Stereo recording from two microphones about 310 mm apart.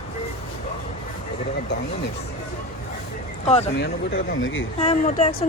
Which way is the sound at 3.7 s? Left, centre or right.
Left.